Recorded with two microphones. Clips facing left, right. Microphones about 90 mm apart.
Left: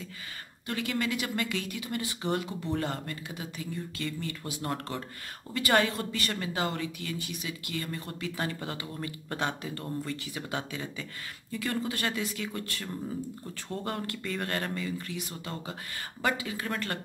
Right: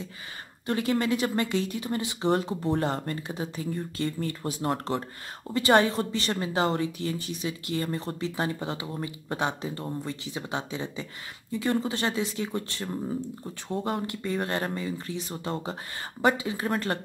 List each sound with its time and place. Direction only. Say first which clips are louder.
0.7 s a woman's voice: right 6 dB; 30° right (ahead or behind)